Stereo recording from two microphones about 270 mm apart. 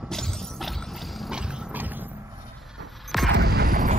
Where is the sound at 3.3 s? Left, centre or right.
Right.